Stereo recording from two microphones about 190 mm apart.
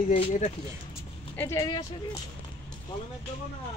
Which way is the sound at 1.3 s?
15° left (ahead or behind).